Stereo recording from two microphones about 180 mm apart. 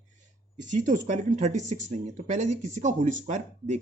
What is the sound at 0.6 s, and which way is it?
Speech, 45° right (ahead or behind).